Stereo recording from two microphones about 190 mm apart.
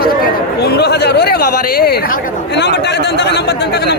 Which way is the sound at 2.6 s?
65° left (ahead or behind).